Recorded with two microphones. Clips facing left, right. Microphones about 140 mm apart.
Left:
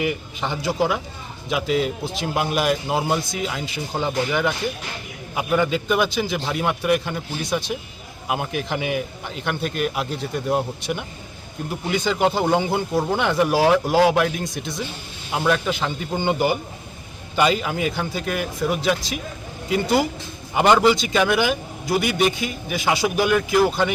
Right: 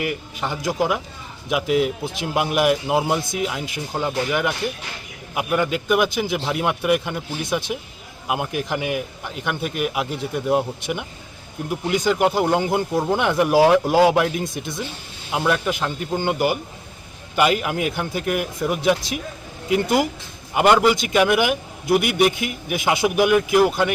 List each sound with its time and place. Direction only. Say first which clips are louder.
0.0 s a man's voice: left 1 dB; 5° right (ahead or behind)
15.3 s a man's voice: even; 5° right (ahead or behind)
20.5 s a man's voice: even; 10° right (ahead or behind)